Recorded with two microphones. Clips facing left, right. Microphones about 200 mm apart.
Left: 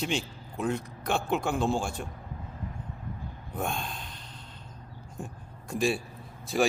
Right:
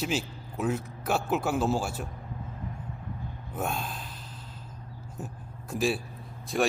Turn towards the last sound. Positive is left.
turn(degrees=0)  # may be behind; listen again after turning